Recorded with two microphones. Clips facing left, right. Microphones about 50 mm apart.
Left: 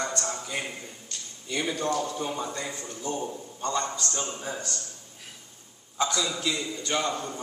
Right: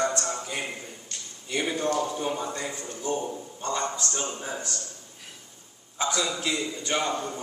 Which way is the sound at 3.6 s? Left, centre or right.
Right.